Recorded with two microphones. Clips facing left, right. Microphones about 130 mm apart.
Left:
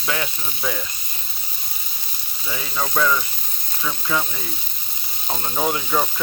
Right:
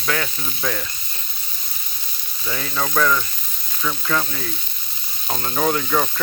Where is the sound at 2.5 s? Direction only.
15° left (ahead or behind).